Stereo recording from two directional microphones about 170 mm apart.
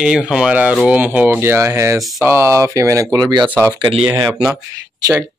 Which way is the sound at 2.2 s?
15° right (ahead or behind).